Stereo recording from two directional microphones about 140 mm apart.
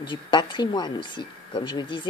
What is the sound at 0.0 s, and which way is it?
Speech, 35° left (ahead or behind).